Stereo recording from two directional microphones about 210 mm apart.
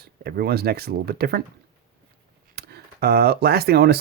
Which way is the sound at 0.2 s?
50° right (ahead or behind).